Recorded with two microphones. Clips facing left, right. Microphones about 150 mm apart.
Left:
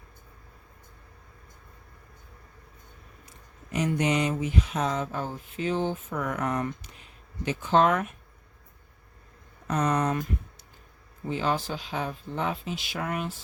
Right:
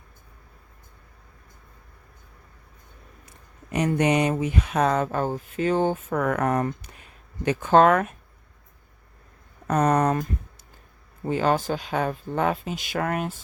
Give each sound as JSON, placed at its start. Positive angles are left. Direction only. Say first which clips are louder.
{"t": 3.7, "sound": "speech", "louder": "right 4 dB", "side_deg": -60}
{"t": 9.6, "sound": "speech", "louder": "right 5 dB", "side_deg": -55}
{"t": 11.3, "sound": "speech", "louder": "right 6 dB", "side_deg": -50}